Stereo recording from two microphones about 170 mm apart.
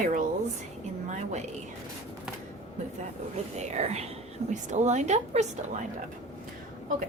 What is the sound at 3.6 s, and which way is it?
Speech, 40° right (ahead or behind).